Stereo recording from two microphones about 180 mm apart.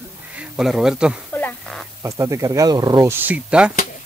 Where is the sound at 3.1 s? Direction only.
5° right (ahead or behind).